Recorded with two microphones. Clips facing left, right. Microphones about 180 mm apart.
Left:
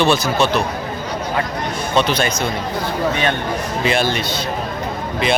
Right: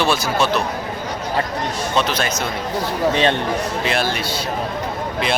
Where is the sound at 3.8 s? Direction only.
Centre (ahead or behind).